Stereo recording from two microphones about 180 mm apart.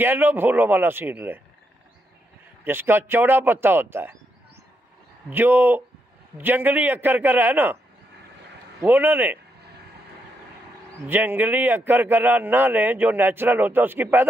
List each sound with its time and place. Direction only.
0.0 s speech: 10° right (ahead or behind)
2.6 s speech: 10° right (ahead or behind)
5.3 s speech: 10° right (ahead or behind)
8.8 s speech: 10° right (ahead or behind)
11.1 s speech: 10° right (ahead or behind)